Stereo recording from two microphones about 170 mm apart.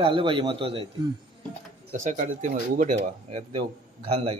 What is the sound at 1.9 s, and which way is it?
Speech, 45° right (ahead or behind).